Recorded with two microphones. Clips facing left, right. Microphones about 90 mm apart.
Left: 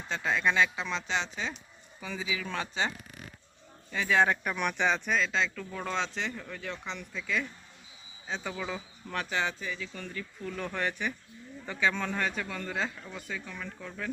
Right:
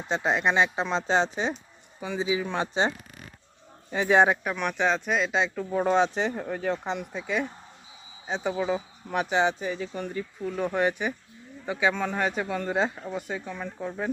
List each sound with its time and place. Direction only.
0.1 s speech: 25° right (ahead or behind)
3.9 s speech: 25° right (ahead or behind)
4.4 s speech: centre (ahead or behind)
5.5 s speech: 30° right (ahead or behind)
6.3 s speech: 45° right (ahead or behind)
8.3 s speech: 25° right (ahead or behind)
9.9 s speech: 20° right (ahead or behind)